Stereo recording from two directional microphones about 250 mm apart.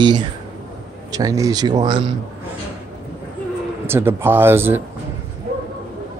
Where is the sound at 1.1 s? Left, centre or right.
Centre.